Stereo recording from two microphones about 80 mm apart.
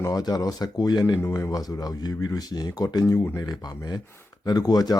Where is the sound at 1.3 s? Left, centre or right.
Left.